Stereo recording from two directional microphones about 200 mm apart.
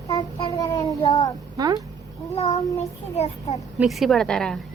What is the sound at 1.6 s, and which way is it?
Speech, 20° right (ahead or behind).